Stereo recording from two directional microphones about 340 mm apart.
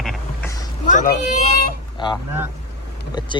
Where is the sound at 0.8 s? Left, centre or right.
Left.